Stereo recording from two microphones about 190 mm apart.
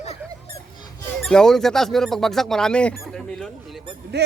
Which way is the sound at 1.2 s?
5° left (ahead or behind).